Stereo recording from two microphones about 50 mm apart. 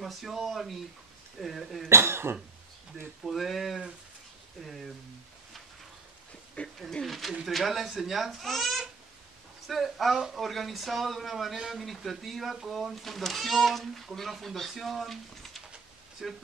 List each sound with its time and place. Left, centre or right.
0.0 s speech: centre
1.9 s speech: right
3.3 s speech: centre
6.6 s speech: left
7.1 s speech: centre